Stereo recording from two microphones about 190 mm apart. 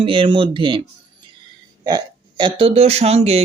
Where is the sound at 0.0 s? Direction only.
25° right (ahead or behind).